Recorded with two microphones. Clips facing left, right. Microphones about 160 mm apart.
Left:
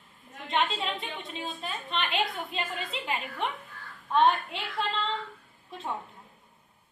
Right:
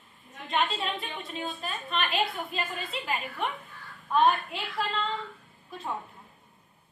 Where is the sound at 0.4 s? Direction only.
20° left (ahead or behind).